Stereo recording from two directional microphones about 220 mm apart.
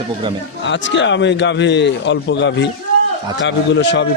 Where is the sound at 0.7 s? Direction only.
55° left (ahead or behind).